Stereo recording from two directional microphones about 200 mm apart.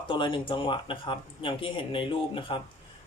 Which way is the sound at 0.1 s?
25° left (ahead or behind).